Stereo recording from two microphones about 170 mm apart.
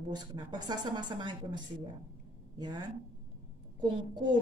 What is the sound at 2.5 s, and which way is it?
Speech, 25° right (ahead or behind).